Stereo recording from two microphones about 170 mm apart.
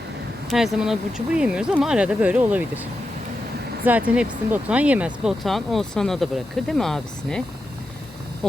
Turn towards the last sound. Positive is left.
turn(degrees=5)  # may be behind; listen again after turning